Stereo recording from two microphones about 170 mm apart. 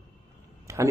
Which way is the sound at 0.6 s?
20° right (ahead or behind).